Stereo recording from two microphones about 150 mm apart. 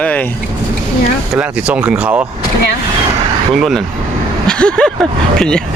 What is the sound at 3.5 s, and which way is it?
Speech, centre (ahead or behind).